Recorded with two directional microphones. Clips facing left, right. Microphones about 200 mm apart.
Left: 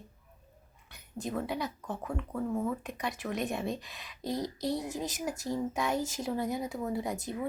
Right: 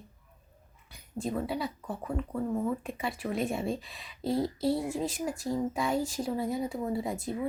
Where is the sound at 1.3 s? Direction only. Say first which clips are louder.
Right 1 dB; centre (ahead or behind).